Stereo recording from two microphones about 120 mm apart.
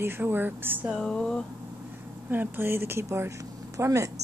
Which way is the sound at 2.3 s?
15° right (ahead or behind).